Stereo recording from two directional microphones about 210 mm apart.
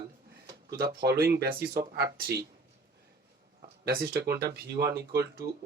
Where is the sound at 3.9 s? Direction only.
45° right (ahead or behind).